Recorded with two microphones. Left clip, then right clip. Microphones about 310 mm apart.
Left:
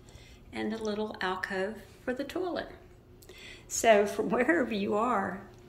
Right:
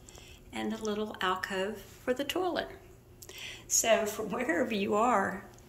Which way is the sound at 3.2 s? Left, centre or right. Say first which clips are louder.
Right 5 dB; centre.